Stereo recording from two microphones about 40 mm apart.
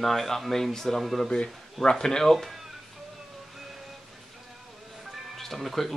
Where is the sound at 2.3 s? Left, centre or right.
Centre.